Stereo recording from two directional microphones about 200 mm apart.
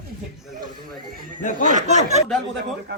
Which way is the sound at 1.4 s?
40° left (ahead or behind).